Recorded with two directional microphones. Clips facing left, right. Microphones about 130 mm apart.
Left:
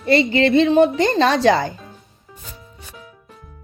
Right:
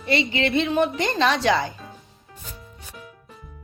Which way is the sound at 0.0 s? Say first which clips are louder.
Left 7 dB; 40° left (ahead or behind).